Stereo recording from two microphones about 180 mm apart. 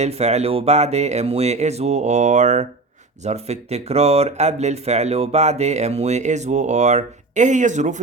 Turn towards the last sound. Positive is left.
turn(degrees=-40)  # may be behind; listen again after turning